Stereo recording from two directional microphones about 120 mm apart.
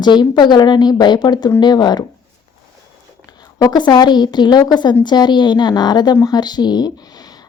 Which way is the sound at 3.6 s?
35° left (ahead or behind).